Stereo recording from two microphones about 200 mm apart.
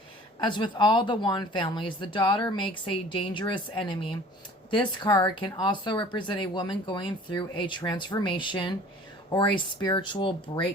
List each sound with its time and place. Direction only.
0.3 s speech: 25° left (ahead or behind)